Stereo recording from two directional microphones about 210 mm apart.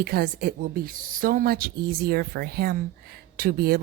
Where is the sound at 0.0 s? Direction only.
45° right (ahead or behind).